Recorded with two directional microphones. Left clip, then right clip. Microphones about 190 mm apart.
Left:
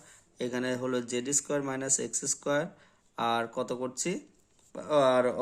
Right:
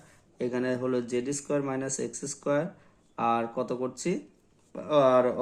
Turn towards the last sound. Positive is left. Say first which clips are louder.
# right 2 dB
turn(degrees=25)  # may be behind; listen again after turning